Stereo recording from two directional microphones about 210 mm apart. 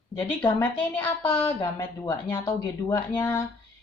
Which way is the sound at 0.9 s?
10° left (ahead or behind).